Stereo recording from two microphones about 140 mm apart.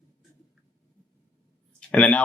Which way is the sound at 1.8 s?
10° left (ahead or behind).